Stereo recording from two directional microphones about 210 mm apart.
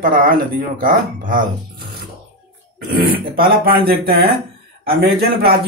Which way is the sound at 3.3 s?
45° right (ahead or behind).